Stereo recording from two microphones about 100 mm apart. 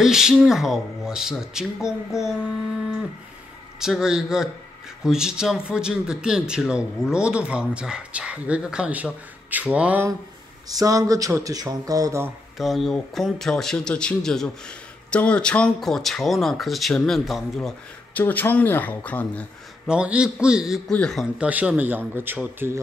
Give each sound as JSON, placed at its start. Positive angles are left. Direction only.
{"t": 0.0, "sound": "speech", "side_deg": -5}
{"t": 3.8, "sound": "speech", "side_deg": -5}
{"t": 10.7, "sound": "speech", "side_deg": -35}
{"t": 12.5, "sound": "speech", "side_deg": 0}
{"t": 18.1, "sound": "speech", "side_deg": 20}
{"t": 19.9, "sound": "speech", "side_deg": -10}
{"t": 20.9, "sound": "speech", "side_deg": 5}
{"t": 21.4, "sound": "speech", "side_deg": -15}